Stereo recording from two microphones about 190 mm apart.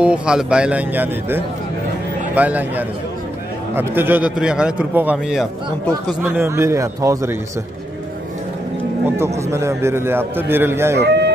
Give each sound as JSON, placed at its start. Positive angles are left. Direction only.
{"t": 0.0, "sound": "a man's voice", "side_deg": -5}
{"t": 6.2, "sound": "a man's voice", "side_deg": -15}
{"t": 9.0, "sound": "a man's voice", "side_deg": -15}
{"t": 11.0, "sound": "chicken", "side_deg": -60}